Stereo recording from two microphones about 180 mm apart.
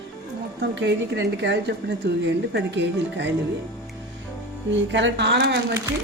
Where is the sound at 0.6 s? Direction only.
75° right (ahead or behind).